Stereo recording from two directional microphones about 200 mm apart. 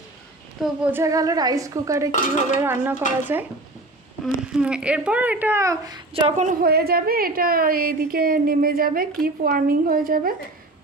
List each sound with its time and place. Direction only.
0.6 s a child's voice: 5° right (ahead or behind)
2.1 s dishes: 40° left (ahead or behind)
2.6 s a child's voice: 10° right (ahead or behind)
4.5 s a child's voice: 5° right (ahead or behind); by 6.7 s 35° right (ahead or behind)
6.7 s a woman's voice: 50° right (ahead or behind)